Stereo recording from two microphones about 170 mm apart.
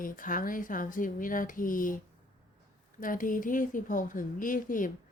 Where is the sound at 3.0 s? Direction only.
55° left (ahead or behind).